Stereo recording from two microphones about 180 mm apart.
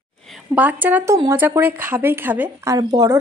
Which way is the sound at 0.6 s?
10° right (ahead or behind).